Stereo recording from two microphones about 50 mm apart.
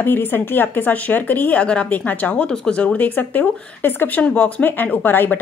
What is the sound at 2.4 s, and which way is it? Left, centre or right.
Speech, centre.